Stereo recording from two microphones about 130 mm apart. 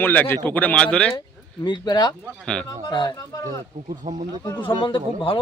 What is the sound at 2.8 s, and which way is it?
Speech, 35° left (ahead or behind).